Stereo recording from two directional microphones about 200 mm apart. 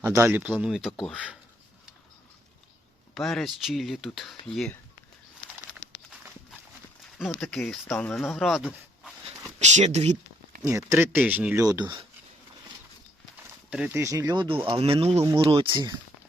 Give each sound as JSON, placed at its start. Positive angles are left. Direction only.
{"t": 0.0, "sound": "speech", "side_deg": -10}
{"t": 3.2, "sound": "speech", "side_deg": 0}
{"t": 7.3, "sound": "speech", "side_deg": 0}
{"t": 9.6, "sound": "speech", "side_deg": -35}
{"t": 10.6, "sound": "speech", "side_deg": -15}
{"t": 13.7, "sound": "speech", "side_deg": -5}